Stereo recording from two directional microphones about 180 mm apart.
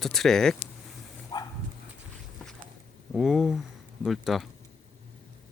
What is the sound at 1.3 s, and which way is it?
Dog, 25° left (ahead or behind).